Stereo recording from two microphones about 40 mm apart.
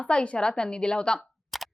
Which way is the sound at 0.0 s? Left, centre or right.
Left.